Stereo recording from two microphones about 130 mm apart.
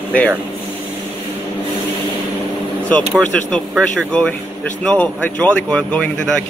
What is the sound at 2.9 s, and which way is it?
Speech, 10° left (ahead or behind).